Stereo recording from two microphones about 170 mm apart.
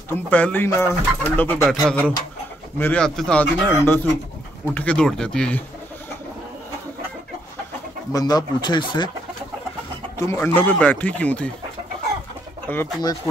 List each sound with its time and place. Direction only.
0.1 s speech: 10° left (ahead or behind)
8.1 s speech: 20° left (ahead or behind)
10.1 s speech: 15° left (ahead or behind)
12.7 s speech: 10° left (ahead or behind)